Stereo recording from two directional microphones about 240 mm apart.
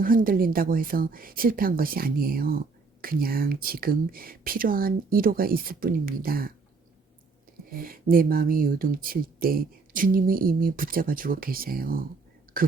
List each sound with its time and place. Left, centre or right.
0.0 s speech: right
7.7 s speech: right